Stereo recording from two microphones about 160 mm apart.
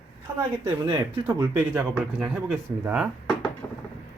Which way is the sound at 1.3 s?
15° right (ahead or behind).